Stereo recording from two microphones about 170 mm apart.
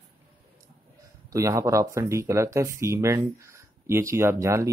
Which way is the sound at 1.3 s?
20° right (ahead or behind).